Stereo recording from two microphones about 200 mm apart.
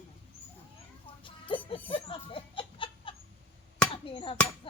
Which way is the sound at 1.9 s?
25° left (ahead or behind).